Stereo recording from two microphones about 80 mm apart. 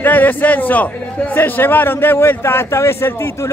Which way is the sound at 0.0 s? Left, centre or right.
Left.